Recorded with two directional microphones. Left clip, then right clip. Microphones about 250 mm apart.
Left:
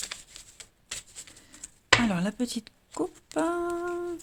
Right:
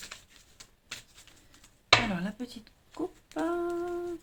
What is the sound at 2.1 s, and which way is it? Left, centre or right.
Speech, left.